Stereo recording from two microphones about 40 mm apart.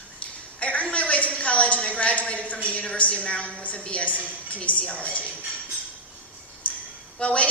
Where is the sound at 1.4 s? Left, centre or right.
Left.